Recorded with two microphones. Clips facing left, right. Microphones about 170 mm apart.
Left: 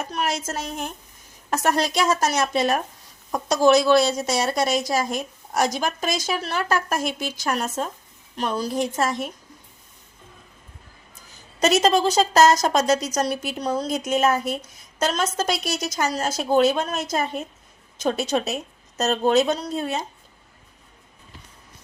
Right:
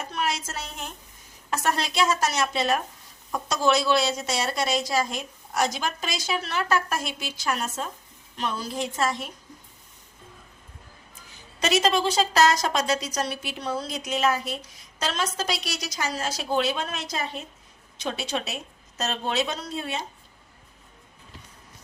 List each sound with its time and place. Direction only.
0.2 s a woman's voice: 45° left (ahead or behind)
11.6 s a woman's voice: 45° left (ahead or behind)